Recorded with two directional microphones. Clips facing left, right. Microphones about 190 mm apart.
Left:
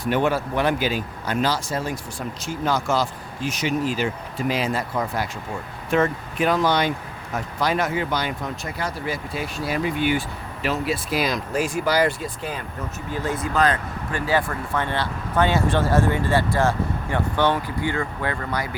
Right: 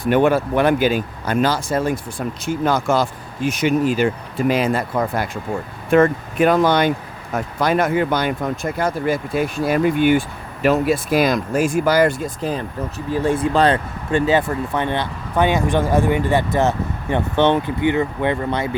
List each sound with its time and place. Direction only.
0.0 s speech: 55° right (ahead or behind); by 18.8 s 25° right (ahead or behind)